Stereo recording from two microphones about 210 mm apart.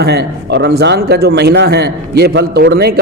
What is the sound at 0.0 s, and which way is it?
A man's voice, 50° right (ahead or behind).